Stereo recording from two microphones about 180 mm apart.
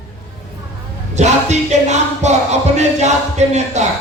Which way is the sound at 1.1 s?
40° right (ahead or behind).